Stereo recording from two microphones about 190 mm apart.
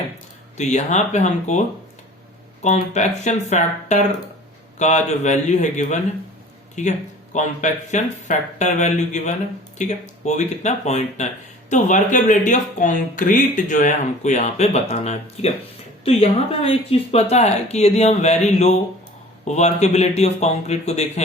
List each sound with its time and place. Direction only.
0.5 s speech: 35° left (ahead or behind)